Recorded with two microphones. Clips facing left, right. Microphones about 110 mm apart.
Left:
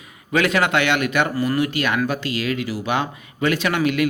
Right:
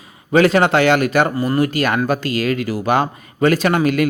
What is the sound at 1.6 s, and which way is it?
A man's voice, 40° right (ahead or behind).